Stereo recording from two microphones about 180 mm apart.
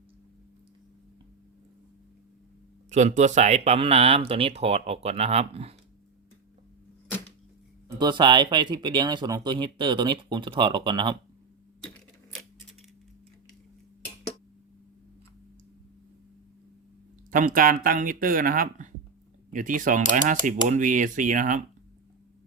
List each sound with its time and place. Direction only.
2.9 s speech: 40° right (ahead or behind)
7.9 s speech: 25° right (ahead or behind)
17.3 s speech: 50° right (ahead or behind)